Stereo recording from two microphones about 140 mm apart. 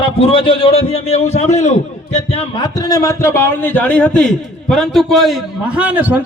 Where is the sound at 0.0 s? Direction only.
40° left (ahead or behind).